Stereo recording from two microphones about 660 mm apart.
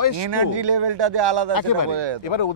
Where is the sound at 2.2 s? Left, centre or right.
Left.